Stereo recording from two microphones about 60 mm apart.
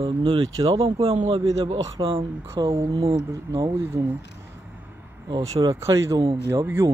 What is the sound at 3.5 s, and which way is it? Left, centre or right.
Speech, right.